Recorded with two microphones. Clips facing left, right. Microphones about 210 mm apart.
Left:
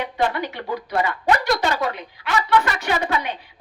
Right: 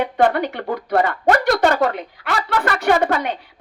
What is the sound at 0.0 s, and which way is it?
A woman's voice, 55° right (ahead or behind).